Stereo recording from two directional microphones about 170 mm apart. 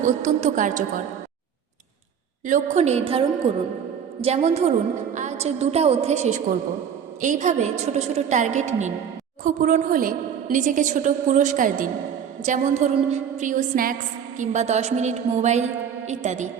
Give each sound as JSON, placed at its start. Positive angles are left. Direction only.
{"t": 0.0, "sound": "a woman's voice", "side_deg": -45}
{"t": 2.5, "sound": "a woman's voice", "side_deg": -40}
{"t": 14.3, "sound": "a woman's voice", "side_deg": -40}